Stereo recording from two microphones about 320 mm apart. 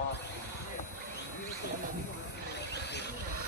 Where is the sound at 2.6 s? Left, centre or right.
Left.